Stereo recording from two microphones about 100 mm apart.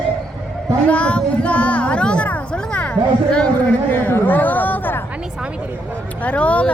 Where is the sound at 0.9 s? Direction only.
10° left (ahead or behind).